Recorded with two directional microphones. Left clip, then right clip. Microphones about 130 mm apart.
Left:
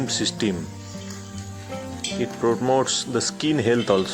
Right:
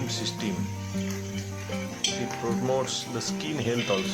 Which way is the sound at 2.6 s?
55° left (ahead or behind).